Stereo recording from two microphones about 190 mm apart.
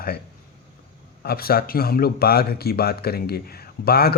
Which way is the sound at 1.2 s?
55° left (ahead or behind).